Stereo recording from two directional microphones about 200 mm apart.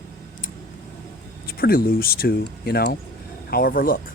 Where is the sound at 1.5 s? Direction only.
50° left (ahead or behind).